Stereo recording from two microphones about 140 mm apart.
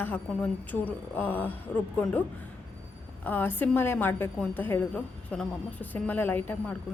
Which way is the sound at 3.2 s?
15° left (ahead or behind).